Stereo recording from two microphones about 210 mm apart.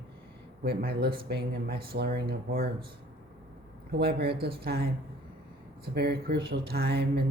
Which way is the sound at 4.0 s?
50° right (ahead or behind).